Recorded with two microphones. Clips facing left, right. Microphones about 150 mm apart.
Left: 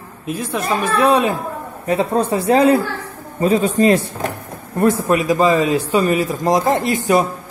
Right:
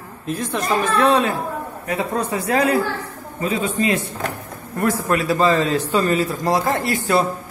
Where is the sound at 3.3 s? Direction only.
40° left (ahead or behind).